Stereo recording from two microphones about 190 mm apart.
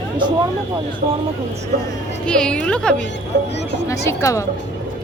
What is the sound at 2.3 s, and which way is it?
Speech, 5° left (ahead or behind).